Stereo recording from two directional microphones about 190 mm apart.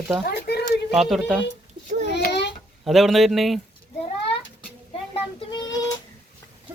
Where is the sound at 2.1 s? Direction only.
65° left (ahead or behind).